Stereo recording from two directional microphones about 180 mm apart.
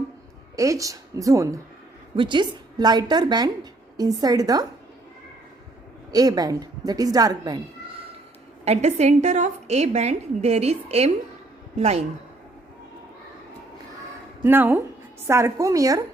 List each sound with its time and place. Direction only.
0.5 s a woman's voice: 20° right (ahead or behind)
6.1 s a woman's voice: 20° right (ahead or behind)
8.6 s a woman's voice: 35° right (ahead or behind)
14.4 s a woman's voice: 10° right (ahead or behind)